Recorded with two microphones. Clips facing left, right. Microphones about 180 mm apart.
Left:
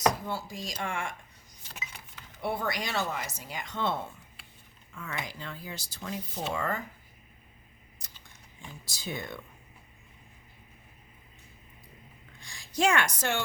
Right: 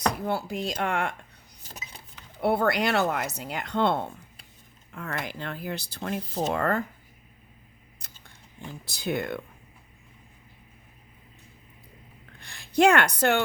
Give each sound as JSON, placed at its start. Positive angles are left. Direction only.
{"t": 0.3, "sound": "speech", "side_deg": -65}
{"t": 1.6, "sound": "keys jangling", "side_deg": -35}
{"t": 2.4, "sound": "speech", "side_deg": -65}
{"t": 8.1, "sound": "speech", "side_deg": -60}
{"t": 12.4, "sound": "a woman's voice", "side_deg": -60}